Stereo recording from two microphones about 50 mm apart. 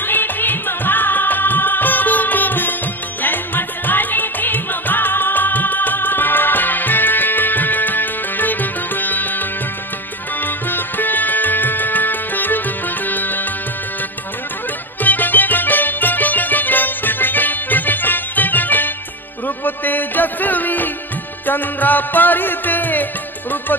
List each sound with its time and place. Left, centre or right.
0.0 s music: left
15.0 s music: left